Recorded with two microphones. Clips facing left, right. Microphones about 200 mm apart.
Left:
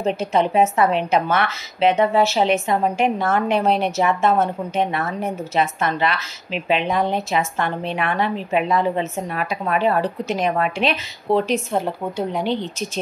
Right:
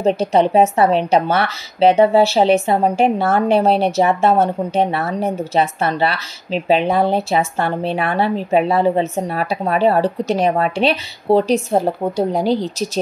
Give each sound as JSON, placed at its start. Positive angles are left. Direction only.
{"t": 0.0, "sound": "speech", "side_deg": -35}